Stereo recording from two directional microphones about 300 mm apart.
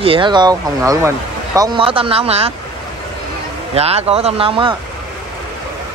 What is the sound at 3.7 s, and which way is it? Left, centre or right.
Speech, centre.